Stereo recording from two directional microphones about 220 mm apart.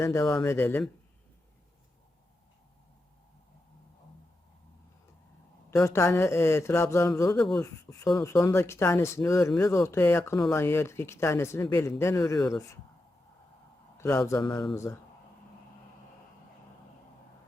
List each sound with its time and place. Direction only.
0.0 s speech: 15° left (ahead or behind)
5.7 s speech: 10° left (ahead or behind)
7.9 s speech: 15° left (ahead or behind)
14.0 s speech: 15° left (ahead or behind)